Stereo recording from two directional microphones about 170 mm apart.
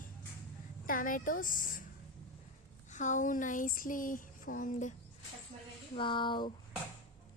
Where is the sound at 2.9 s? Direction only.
45° left (ahead or behind).